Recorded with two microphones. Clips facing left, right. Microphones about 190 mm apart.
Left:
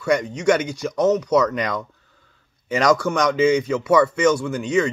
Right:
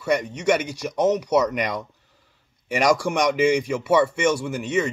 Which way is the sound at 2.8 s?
10° right (ahead or behind).